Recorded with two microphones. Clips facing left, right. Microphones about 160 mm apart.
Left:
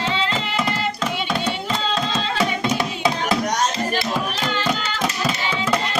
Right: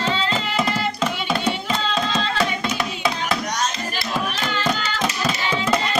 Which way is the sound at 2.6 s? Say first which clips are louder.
Left 3 dB; 25° left (ahead or behind).